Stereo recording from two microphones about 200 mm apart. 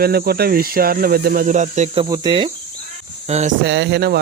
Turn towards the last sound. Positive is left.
turn(degrees=-55)  # may be behind; listen again after turning